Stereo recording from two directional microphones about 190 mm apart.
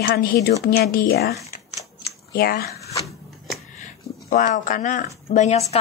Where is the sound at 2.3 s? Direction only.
50° left (ahead or behind).